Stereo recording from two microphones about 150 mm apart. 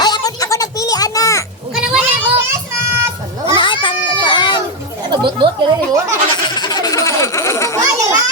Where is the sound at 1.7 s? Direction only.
5° right (ahead or behind).